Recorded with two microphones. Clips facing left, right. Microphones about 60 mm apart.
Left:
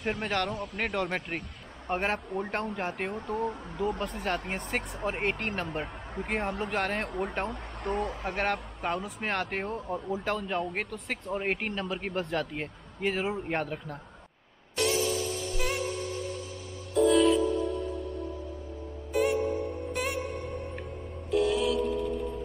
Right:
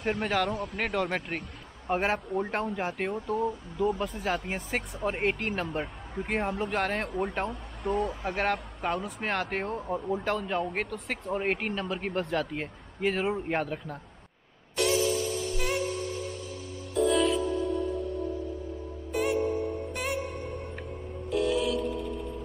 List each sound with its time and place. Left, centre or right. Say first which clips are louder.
0.0 s speech: right 2 dB; centre
3.3 s speech: right 2 dB; left
4.5 s speech: even; centre
15.0 s music: right 2 dB; right
15.5 s music: even; centre
16.9 s music: left 3 dB; centre
19.1 s music: left 1 dB; centre